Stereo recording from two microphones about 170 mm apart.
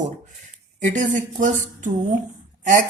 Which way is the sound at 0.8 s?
45° right (ahead or behind).